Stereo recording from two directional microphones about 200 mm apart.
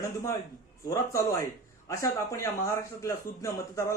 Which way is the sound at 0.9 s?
15° left (ahead or behind).